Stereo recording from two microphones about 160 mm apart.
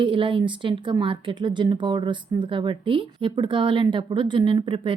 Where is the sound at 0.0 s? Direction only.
30° right (ahead or behind).